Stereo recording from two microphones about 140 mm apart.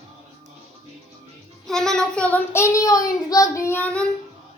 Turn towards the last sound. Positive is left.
turn(degrees=10)  # may be behind; listen again after turning